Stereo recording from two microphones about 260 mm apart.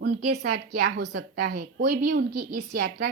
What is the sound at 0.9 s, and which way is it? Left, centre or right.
A woman's voice, right.